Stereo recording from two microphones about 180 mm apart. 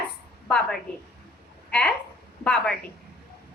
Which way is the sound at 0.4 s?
5° left (ahead or behind).